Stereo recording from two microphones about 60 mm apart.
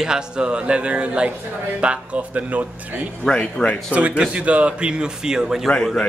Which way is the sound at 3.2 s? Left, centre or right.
Centre.